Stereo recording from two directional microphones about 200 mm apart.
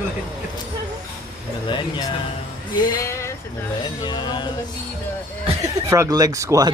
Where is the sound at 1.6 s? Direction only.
25° left (ahead or behind).